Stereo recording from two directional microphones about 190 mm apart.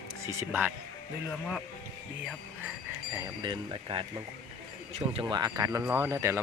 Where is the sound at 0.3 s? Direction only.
10° right (ahead or behind).